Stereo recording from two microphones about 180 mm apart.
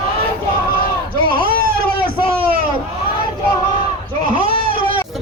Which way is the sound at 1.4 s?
55° right (ahead or behind).